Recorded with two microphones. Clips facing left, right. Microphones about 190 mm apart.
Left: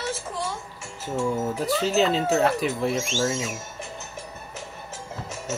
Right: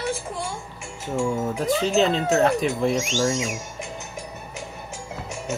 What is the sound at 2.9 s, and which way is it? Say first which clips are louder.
Speech: right 3 dB; 15° right (ahead or behind).